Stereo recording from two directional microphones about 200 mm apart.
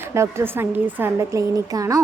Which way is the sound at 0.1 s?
15° right (ahead or behind).